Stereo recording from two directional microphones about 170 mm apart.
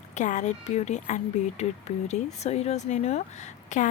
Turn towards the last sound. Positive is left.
turn(degrees=45)  # may be behind; listen again after turning